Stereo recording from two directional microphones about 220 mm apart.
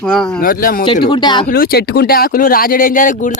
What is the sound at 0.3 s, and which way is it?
Speech, 40° left (ahead or behind).